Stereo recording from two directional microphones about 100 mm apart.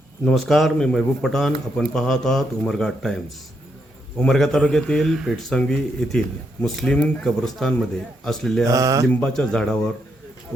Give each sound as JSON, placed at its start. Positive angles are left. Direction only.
{"t": 0.3, "sound": "a man's voice", "side_deg": 0}
{"t": 4.3, "sound": "a man's voice", "side_deg": 5}
{"t": 8.6, "sound": "speech", "side_deg": -35}
{"t": 9.2, "sound": "speech", "side_deg": 10}